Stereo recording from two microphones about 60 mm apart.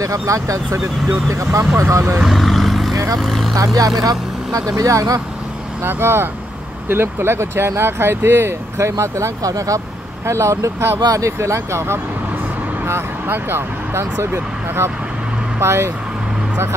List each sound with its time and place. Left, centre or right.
0.0 s speech: right
2.2 s vehicle: centre
2.9 s vehicle: right
3.2 s speech: centre
3.5 s speech: right
5.9 s speech: right
10.2 s speech: right